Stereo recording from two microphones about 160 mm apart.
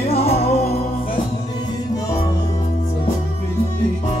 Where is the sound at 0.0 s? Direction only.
40° left (ahead or behind).